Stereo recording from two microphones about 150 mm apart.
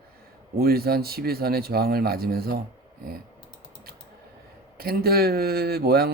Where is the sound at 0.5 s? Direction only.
90° right.